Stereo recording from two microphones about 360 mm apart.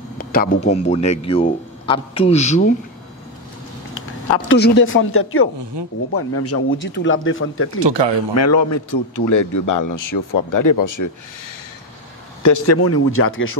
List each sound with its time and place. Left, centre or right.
0.2 s a man's voice: left
3.9 s speech: left
5.8 s speech: right
6.1 s speech: left
8.4 s a man's voice: left
12.4 s speech: left